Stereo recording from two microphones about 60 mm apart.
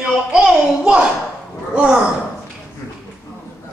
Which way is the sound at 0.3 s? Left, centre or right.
Centre.